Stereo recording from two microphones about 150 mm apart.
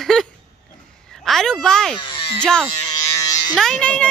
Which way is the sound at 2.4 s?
5° left (ahead or behind).